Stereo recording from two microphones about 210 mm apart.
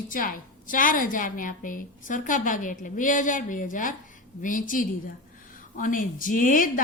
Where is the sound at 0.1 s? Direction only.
40° left (ahead or behind).